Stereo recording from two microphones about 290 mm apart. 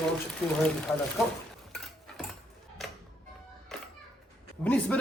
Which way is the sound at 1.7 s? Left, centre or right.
Centre.